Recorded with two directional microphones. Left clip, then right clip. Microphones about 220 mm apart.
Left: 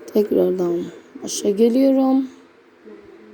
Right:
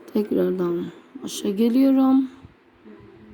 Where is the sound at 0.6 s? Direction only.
30° right (ahead or behind).